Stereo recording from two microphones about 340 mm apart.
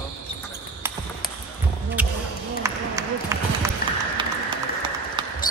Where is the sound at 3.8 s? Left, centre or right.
Left.